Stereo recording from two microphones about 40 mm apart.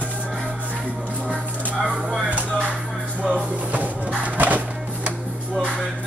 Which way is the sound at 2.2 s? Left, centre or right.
Right.